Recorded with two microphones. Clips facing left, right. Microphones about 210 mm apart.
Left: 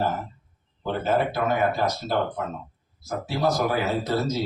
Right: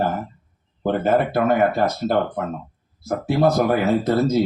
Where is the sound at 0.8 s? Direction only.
55° right (ahead or behind).